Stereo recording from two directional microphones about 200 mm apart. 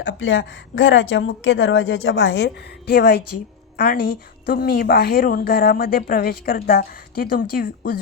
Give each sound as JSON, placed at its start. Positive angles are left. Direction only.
{"t": 0.0, "sound": "a woman's voice", "side_deg": 70}